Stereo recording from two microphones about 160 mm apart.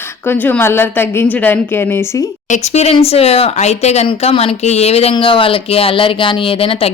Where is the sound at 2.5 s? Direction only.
45° left (ahead or behind).